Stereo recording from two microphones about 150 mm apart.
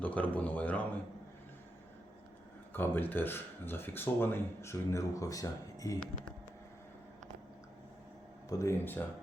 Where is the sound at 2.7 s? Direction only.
15° left (ahead or behind).